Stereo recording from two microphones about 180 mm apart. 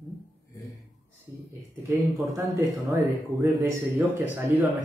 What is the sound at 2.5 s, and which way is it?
Speech, 10° right (ahead or behind).